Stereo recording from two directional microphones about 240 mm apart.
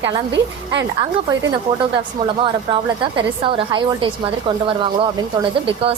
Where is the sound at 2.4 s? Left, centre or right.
Right.